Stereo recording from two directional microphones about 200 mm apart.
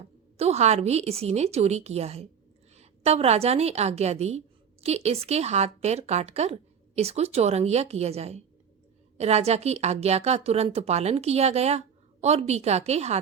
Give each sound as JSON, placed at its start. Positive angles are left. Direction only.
{"t": 0.3, "sound": "a woman's voice", "side_deg": -30}